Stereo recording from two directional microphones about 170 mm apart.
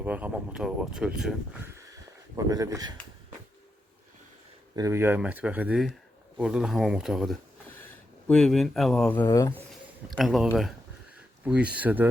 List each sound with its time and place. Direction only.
0.0 s speech: 10° right (ahead or behind)
1.7 s a sound: 20° right (ahead or behind)
4.7 s speech: 20° right (ahead or behind); by 9.2 s 5° left (ahead or behind)
9.2 s speech: 20° left (ahead or behind)
10.1 s speech: centre (ahead or behind)